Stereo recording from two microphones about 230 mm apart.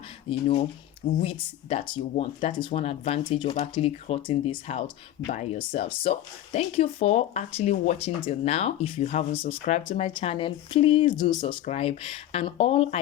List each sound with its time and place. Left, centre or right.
0.3 s speech: left